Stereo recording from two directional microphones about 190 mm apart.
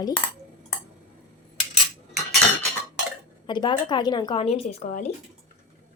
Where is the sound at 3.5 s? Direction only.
25° left (ahead or behind).